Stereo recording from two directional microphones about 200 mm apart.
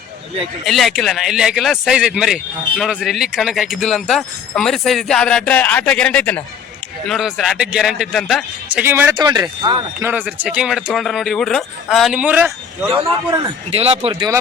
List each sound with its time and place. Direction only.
0.6 s speech: centre (ahead or behind)
8.8 s speech: 10° right (ahead or behind)
10.1 s speech: 10° right (ahead or behind)
13.7 s speech: 30° right (ahead or behind)